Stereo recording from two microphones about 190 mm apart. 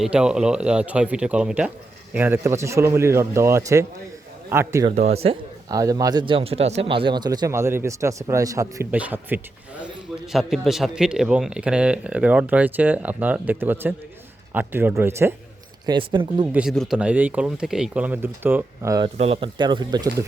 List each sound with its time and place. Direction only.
0.0 s a man's voice: 5° right (ahead or behind)
4.9 s speech: 35° right (ahead or behind)
5.7 s speech: 20° right (ahead or behind)
15.9 s speech: 25° right (ahead or behind)
16.5 s speech: 5° right (ahead or behind)
19.1 s speech: 30° right (ahead or behind)